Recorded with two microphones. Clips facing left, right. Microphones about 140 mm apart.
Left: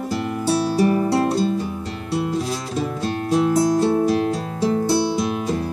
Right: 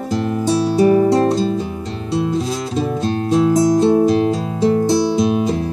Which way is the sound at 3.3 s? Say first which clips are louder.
Right 3 dB; 20° right (ahead or behind).